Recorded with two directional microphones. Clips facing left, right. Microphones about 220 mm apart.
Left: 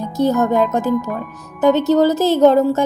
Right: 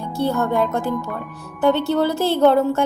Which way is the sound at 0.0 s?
40° left (ahead or behind).